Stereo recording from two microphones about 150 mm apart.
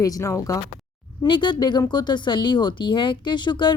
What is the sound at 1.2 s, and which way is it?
Speech, 30° left (ahead or behind).